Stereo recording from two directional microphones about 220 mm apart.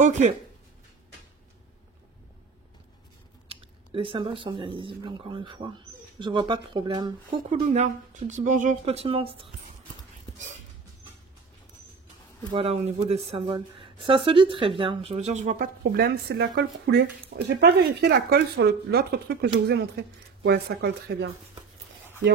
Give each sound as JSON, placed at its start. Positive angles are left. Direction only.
{"t": 0.0, "sound": "speech", "side_deg": -30}
{"t": 3.4, "sound": "speech", "side_deg": -25}
{"t": 7.5, "sound": "speech", "side_deg": -35}
{"t": 12.5, "sound": "speech", "side_deg": -30}